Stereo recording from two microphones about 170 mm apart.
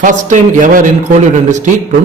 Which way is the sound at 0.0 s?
45° right (ahead or behind).